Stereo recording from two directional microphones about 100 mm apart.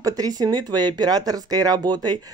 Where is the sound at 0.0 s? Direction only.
35° right (ahead or behind).